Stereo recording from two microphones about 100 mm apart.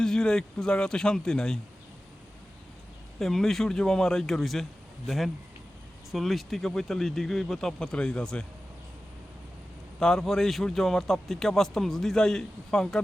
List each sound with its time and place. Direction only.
0.0 s speech: 5° left (ahead or behind)
3.2 s a man's voice: centre (ahead or behind)
10.0 s a man's voice: 5° left (ahead or behind)